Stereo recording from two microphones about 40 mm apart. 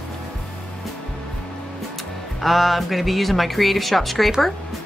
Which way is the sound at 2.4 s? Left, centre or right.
Centre.